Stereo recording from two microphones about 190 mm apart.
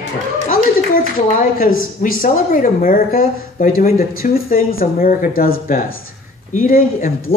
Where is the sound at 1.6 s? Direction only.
50° left (ahead or behind).